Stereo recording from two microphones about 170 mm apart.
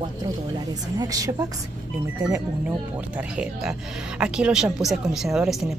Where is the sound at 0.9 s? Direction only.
20° right (ahead or behind).